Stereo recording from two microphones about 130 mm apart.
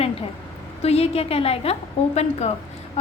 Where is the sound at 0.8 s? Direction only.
55° left (ahead or behind).